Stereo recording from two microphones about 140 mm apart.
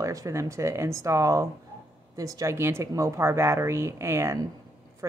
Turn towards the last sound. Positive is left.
turn(degrees=-20)  # may be behind; listen again after turning